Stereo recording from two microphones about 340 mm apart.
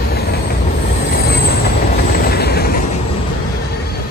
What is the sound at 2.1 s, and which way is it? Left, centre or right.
Vehicle, left.